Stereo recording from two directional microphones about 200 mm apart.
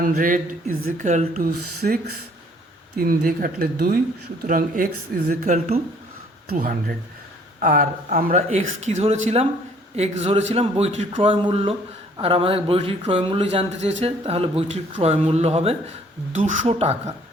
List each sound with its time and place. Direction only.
0.2 s speech: 45° right (ahead or behind)
1.8 s speech: 50° right (ahead or behind); by 5.8 s 35° right (ahead or behind)
6.5 s speech: 45° right (ahead or behind)